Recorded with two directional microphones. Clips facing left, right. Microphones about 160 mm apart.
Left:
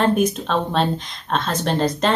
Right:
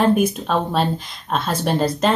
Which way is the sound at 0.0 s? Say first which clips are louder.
Right 1 dB; 5° right (ahead or behind).